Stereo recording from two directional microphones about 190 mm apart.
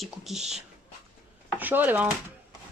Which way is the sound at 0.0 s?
Centre (ahead or behind).